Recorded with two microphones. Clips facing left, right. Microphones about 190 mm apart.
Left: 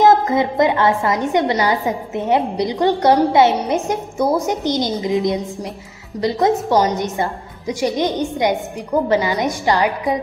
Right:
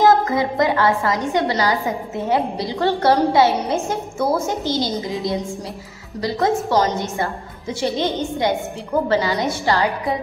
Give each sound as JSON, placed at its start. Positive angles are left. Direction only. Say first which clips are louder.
{"t": 0.0, "sound": "a woman's voice", "louder": "left 2 dB", "side_deg": 20}